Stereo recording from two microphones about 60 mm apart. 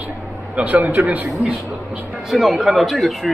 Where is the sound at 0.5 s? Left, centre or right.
Right.